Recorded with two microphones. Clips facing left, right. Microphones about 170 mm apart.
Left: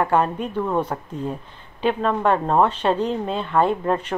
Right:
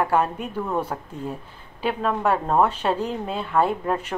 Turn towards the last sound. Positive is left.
turn(degrees=-5)  # may be behind; listen again after turning